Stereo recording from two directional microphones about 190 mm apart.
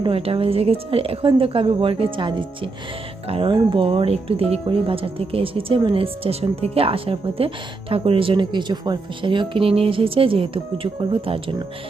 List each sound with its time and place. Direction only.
0.0 s speech: 30° right (ahead or behind)